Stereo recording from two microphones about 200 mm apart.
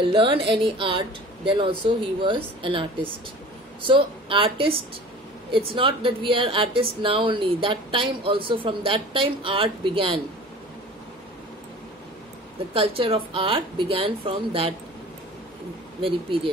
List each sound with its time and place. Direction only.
0.0 s speech: 25° right (ahead or behind)
12.7 s speech: 25° right (ahead or behind)